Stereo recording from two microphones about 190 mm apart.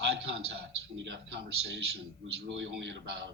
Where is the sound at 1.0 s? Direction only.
70° right (ahead or behind).